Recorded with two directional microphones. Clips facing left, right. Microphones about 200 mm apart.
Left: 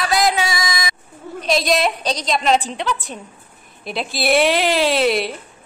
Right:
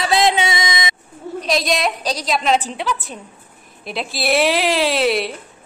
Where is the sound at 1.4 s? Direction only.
Centre (ahead or behind).